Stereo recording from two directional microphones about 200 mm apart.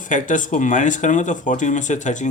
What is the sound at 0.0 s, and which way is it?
Speech, 40° left (ahead or behind).